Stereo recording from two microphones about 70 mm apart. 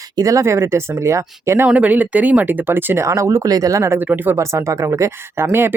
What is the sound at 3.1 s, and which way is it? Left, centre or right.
Speech, right.